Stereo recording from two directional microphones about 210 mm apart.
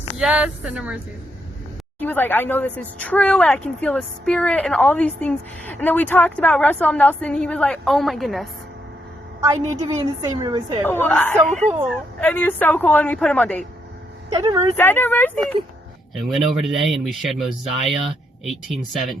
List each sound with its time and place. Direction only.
0.2 s speech: 5° right (ahead or behind)
2.0 s speech: 10° left (ahead or behind)
9.4 s a woman's voice: 20° right (ahead or behind)
10.8 s speech: 10° left (ahead or behind)
14.3 s a woman's voice: 15° right (ahead or behind)
14.8 s speech: 10° left (ahead or behind)
16.3 s speech: centre (ahead or behind)